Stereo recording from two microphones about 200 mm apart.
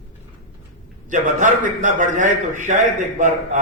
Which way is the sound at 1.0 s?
40° right (ahead or behind).